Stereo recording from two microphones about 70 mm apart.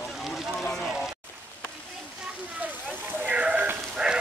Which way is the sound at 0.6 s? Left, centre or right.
Centre.